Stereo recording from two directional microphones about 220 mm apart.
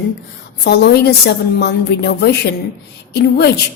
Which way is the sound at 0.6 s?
50° left (ahead or behind).